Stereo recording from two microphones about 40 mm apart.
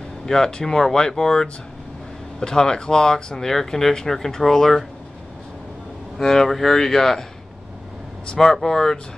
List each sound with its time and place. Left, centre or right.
0.3 s speech: centre
6.1 s speech: centre
8.4 s speech: centre